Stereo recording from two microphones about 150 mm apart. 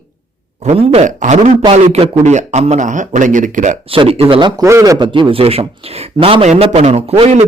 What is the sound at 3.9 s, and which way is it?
A man's voice, 40° right (ahead or behind).